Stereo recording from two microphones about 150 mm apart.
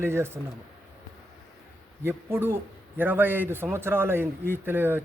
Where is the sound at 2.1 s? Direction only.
15° right (ahead or behind).